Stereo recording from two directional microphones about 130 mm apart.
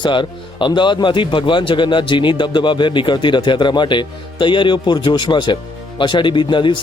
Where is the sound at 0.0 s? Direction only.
40° left (ahead or behind).